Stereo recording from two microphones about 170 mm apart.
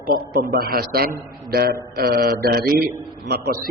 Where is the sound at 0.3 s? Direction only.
60° right (ahead or behind).